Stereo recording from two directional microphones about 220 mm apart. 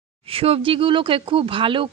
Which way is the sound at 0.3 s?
25° right (ahead or behind).